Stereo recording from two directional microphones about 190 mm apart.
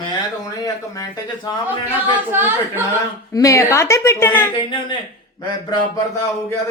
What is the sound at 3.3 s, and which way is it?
A woman's voice, 15° left (ahead or behind).